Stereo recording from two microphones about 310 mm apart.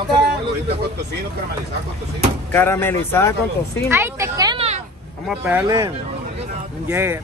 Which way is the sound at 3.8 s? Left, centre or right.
Centre.